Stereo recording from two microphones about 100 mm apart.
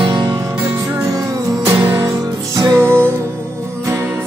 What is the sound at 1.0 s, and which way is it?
Music, 40° right (ahead or behind).